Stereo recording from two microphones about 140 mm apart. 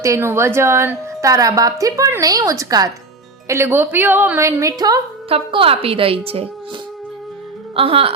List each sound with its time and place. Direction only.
0.0 s a woman's voice: 20° right (ahead or behind)
5.3 s a woman's voice: 40° right (ahead or behind)
7.8 s a woman's voice: 40° right (ahead or behind)